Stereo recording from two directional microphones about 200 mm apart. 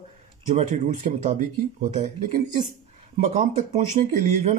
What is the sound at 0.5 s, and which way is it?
Speech, 35° right (ahead or behind).